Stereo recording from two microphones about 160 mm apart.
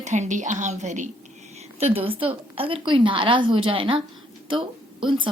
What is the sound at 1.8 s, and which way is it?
A woman's voice, 35° right (ahead or behind).